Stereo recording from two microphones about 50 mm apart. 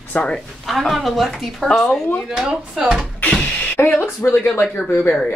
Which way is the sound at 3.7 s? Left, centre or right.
Left.